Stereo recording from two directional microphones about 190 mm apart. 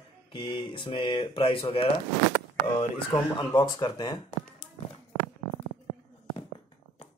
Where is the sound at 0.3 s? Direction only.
25° left (ahead or behind).